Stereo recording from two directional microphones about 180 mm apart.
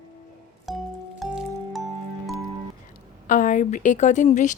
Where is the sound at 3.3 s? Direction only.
45° left (ahead or behind).